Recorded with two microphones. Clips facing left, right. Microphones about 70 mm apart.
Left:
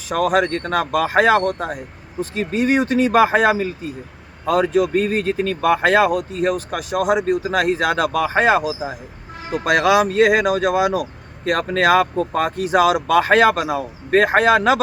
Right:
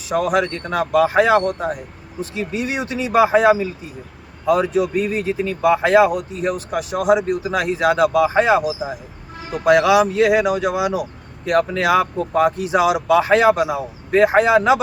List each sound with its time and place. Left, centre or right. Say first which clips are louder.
0.3 s a man's voice: left 1 dB; left
9.6 s a man's voice: right 2 dB; left